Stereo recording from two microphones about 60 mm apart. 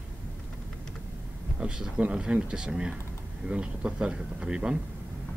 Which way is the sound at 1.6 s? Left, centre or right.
Centre.